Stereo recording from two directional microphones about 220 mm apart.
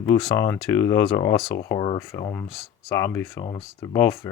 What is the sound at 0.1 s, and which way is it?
Speech, 10° left (ahead or behind).